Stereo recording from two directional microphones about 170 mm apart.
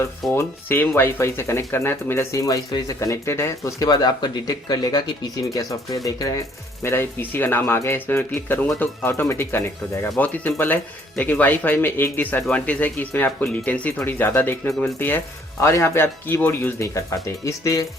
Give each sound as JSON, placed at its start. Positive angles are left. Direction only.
{"t": 0.3, "sound": "speech", "side_deg": 15}